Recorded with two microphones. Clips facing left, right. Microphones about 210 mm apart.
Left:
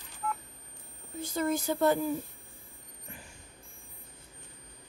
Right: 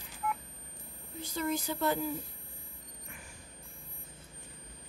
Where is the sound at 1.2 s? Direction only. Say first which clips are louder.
Left 4 dB; 50° left (ahead or behind).